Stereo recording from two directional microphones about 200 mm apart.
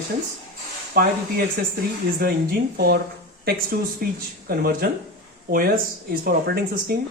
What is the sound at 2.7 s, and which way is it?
Speech, 50° right (ahead or behind).